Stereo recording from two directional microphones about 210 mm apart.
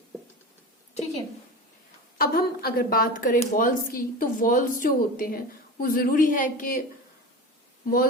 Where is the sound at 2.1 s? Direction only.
45° left (ahead or behind).